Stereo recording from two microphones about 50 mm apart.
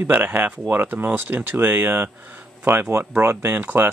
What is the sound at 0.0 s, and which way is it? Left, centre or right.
Speech, right.